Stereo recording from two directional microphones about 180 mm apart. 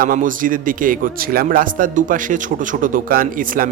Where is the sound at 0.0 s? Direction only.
50° right (ahead or behind).